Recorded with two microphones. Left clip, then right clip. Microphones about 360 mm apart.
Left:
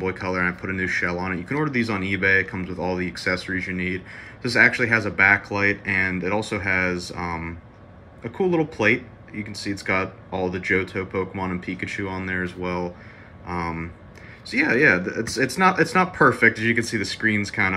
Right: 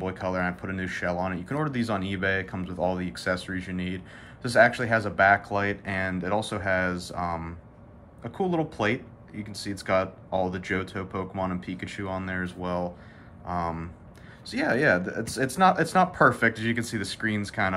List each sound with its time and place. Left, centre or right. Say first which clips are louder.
0.0 s speech: left 5 dB; centre
3.6 s speech: left 8 dB; right
3.9 s speech: left 8 dB; centre